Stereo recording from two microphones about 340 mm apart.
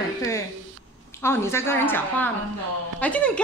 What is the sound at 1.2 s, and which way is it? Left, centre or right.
A woman's voice, centre.